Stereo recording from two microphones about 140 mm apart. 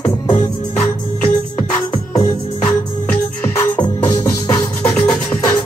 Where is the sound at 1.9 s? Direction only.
35° left (ahead or behind).